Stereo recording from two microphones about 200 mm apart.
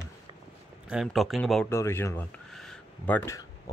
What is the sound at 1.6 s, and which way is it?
Speech, 15° left (ahead or behind).